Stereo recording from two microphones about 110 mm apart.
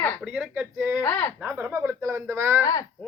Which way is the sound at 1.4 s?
15° right (ahead or behind).